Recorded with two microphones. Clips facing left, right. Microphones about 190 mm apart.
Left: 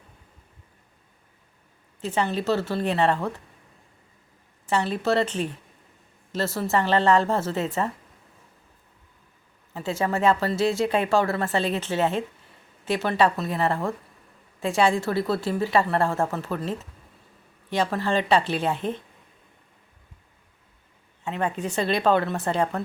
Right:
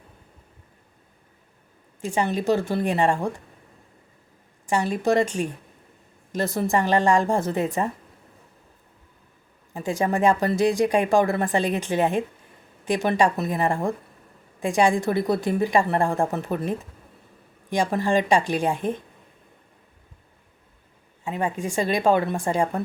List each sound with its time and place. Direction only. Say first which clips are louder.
2.0 s speech: right 1 dB; 10° right (ahead or behind)
4.6 s speech: right 2 dB; 10° right (ahead or behind)
9.7 s speech: right 2 dB; 15° right (ahead or behind)
21.2 s speech: right 1 dB; 10° right (ahead or behind)